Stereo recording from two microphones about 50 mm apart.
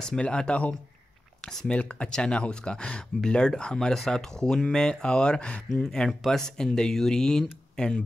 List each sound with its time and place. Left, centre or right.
0.0 s speech: centre
1.4 s speech: centre
1.7 s speech: left
5.9 s speech: centre